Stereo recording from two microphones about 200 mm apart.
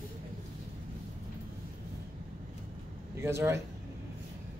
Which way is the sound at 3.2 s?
15° right (ahead or behind).